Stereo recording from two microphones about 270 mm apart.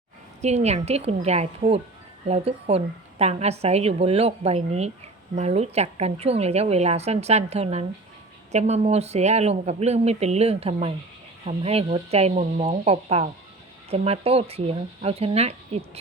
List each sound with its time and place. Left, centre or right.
0.4 s a woman's voice: right